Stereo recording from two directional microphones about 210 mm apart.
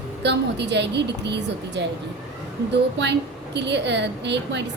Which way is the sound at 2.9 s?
55° right (ahead or behind).